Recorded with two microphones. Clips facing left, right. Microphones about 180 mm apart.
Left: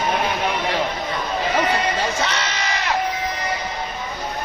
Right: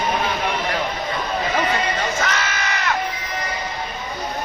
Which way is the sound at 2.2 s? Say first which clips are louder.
Even; 30° left (ahead or behind).